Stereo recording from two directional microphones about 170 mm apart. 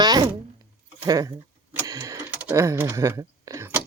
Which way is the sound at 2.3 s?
10° right (ahead or behind).